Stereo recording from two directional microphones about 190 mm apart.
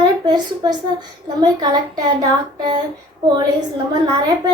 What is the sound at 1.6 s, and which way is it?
Child singing, 20° right (ahead or behind).